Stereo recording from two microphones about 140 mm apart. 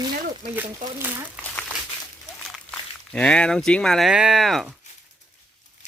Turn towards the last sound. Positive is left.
turn(degrees=0)  # may be behind; listen again after turning